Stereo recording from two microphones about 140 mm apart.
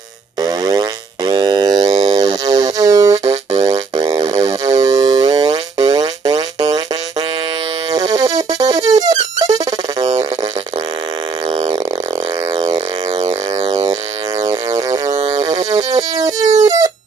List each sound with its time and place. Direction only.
0.4 s music: 30° right (ahead or behind)
12.5 s a sound: 30° right (ahead or behind)
13.7 s pulse: 30° right (ahead or behind)
14.4 s music: 25° right (ahead or behind)